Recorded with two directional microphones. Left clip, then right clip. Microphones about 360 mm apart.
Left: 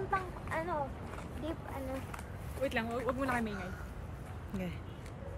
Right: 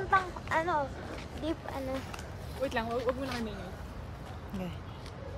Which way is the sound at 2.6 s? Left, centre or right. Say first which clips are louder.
Right 2 dB; centre.